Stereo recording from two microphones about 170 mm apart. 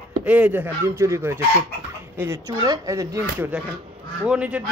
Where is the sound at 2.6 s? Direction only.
20° right (ahead or behind).